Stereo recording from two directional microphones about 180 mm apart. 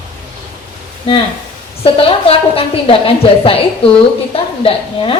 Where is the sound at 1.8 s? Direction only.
30° left (ahead or behind).